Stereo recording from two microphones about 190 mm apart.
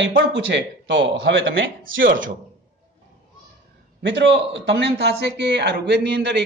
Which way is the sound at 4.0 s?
70° right (ahead or behind).